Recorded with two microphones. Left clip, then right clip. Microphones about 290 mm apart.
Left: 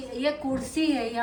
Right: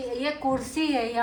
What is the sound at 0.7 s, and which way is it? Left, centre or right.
Speech, centre.